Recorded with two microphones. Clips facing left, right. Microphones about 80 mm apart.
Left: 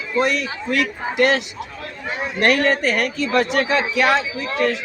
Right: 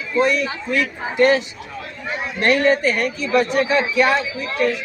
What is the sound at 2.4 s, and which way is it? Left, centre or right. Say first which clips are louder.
A man's voice: right 1 dB; left.